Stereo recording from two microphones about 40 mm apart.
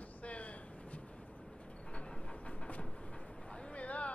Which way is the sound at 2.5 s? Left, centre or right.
Left.